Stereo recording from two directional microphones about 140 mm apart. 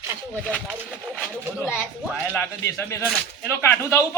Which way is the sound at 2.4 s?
15° left (ahead or behind).